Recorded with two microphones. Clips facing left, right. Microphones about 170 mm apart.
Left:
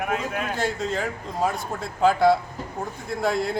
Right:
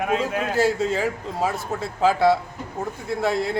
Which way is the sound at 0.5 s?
5° right (ahead or behind).